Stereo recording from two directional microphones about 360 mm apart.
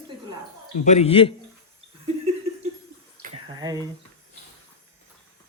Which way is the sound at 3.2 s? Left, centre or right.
Centre.